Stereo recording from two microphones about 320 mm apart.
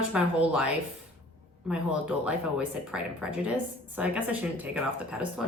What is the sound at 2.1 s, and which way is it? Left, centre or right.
A woman's voice, centre.